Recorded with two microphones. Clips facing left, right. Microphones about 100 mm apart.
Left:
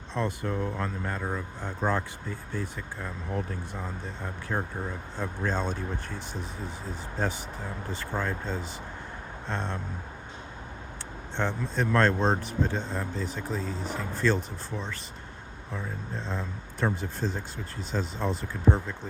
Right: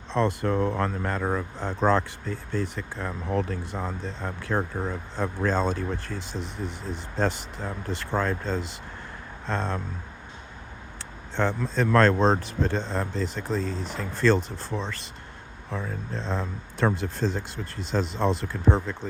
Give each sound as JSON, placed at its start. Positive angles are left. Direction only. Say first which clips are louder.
{"t": 0.1, "sound": "speech", "louder": "right 6 dB", "side_deg": -90}
{"t": 11.3, "sound": "speech", "louder": "right 4 dB", "side_deg": -90}